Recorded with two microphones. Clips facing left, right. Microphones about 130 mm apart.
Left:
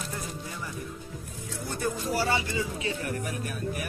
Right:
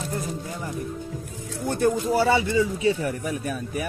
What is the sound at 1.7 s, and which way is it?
Speech, 65° right (ahead or behind).